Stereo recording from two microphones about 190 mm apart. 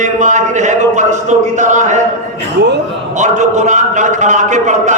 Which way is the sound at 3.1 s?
40° right (ahead or behind).